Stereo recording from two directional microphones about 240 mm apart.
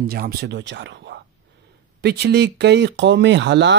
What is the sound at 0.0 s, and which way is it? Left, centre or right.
A man's voice, right.